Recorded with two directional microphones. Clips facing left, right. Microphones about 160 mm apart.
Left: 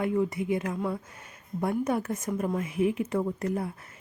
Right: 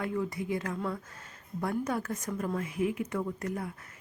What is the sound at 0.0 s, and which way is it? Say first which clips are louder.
A woman's voice: left 6 dB; 20° left (ahead or behind).